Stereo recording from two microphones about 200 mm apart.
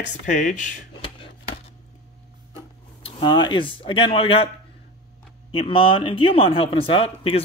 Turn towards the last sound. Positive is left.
turn(degrees=25)  # may be behind; listen again after turning